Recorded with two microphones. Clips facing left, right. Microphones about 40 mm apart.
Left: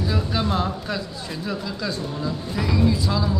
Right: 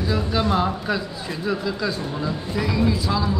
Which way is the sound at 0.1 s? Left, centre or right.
Centre.